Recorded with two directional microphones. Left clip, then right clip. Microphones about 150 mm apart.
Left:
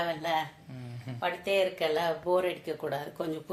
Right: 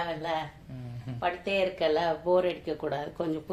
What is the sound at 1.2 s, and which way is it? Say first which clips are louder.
Speech: even; 40° right (ahead or behind).